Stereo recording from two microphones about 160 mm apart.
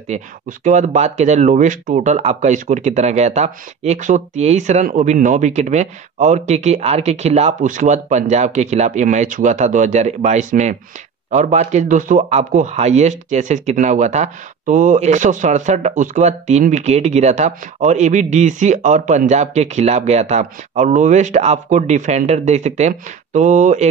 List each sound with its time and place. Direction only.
0.1 s a man's voice: 50° right (ahead or behind)